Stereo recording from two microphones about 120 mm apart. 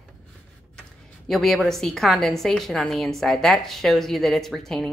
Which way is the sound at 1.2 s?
Centre (ahead or behind).